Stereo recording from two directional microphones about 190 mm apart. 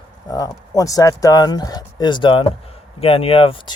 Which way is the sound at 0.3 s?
20° left (ahead or behind).